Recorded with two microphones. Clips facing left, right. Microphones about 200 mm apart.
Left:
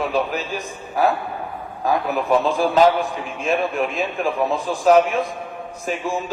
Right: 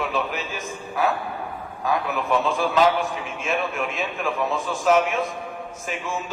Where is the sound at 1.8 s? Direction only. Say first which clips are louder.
Left 4 dB; 35° left (ahead or behind).